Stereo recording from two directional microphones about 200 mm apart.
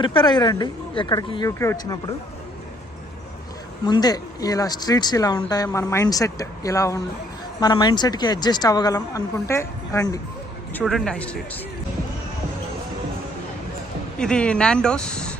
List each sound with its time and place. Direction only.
0.0 s a woman's voice: 25° left (ahead or behind)
3.8 s a woman's voice: 20° left (ahead or behind)
10.8 s speech: centre (ahead or behind)
14.2 s speech: 5° left (ahead or behind)